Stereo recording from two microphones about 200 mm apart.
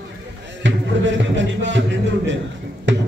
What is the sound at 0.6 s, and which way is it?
Music, 65° right (ahead or behind).